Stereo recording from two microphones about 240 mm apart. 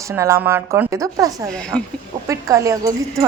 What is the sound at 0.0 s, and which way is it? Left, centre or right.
A woman's voice, centre.